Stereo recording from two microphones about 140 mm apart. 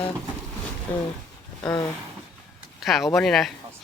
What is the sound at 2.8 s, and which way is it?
Speech, centre (ahead or behind).